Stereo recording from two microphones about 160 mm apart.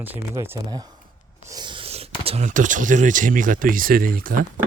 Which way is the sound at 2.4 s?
55° right (ahead or behind).